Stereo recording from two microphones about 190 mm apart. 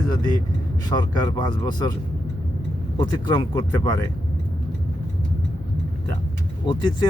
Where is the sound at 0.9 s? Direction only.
25° left (ahead or behind).